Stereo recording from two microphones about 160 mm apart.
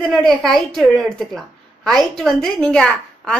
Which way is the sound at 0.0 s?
Centre (ahead or behind).